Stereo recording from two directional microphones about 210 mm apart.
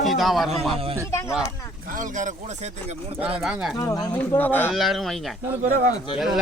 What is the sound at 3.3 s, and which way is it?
Speech, 5° right (ahead or behind).